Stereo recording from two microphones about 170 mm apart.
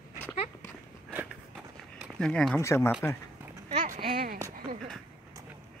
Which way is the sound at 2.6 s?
15° left (ahead or behind).